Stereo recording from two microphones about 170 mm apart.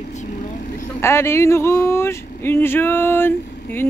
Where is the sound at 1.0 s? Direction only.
15° left (ahead or behind).